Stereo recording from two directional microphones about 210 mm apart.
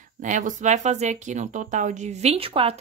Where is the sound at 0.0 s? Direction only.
35° right (ahead or behind).